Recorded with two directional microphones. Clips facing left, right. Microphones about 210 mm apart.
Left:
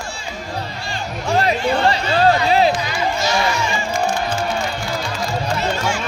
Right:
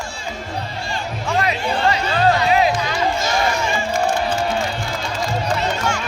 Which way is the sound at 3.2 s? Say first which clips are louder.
Even; 50° right (ahead or behind).